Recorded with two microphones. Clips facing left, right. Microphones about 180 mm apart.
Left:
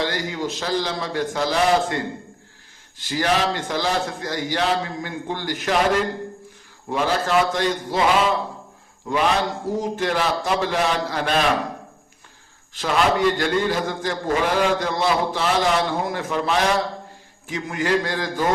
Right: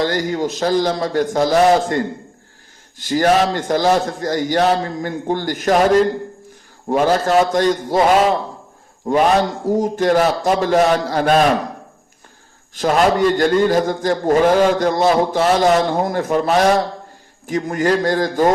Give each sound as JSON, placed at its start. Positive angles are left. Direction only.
{"t": 0.0, "sound": "a man's voice", "side_deg": -45}
{"t": 3.0, "sound": "a man's voice", "side_deg": -45}
{"t": 12.7, "sound": "a man's voice", "side_deg": -45}